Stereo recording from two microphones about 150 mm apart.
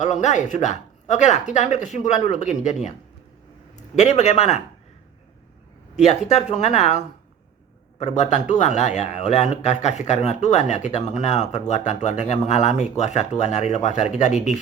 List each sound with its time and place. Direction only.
0.0 s a man's voice: 50° left (ahead or behind)
3.9 s a man's voice: 50° left (ahead or behind)
6.0 s a man's voice: 45° left (ahead or behind)